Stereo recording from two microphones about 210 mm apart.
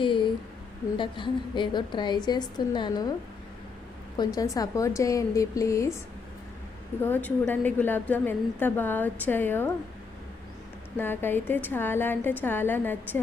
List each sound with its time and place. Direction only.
0.9 s a woman's voice: 25° left (ahead or behind)
4.2 s a woman's voice: 15° left (ahead or behind)
7.0 s a woman's voice: 10° left (ahead or behind)
10.9 s a woman's voice: 10° left (ahead or behind)